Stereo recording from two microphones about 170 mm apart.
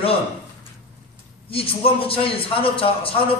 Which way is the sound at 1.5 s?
35° left (ahead or behind).